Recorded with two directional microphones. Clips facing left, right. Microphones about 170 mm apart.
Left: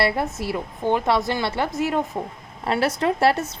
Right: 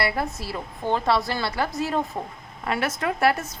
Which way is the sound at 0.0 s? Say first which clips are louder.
Left 4 dB; 25° left (ahead or behind).